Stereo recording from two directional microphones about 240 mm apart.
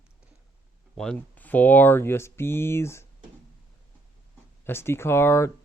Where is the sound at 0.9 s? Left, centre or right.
Centre.